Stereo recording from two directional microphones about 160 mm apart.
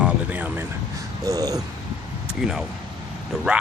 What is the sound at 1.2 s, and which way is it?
Speech, 20° right (ahead or behind).